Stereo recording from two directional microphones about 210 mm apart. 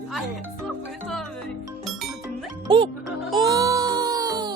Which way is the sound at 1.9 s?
Centre (ahead or behind).